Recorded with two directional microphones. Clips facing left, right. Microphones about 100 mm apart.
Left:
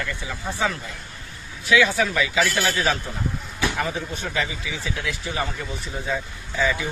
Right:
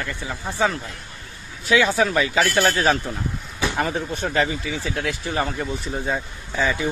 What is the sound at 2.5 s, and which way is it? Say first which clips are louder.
Speech: right 4 dB; 45° right (ahead or behind).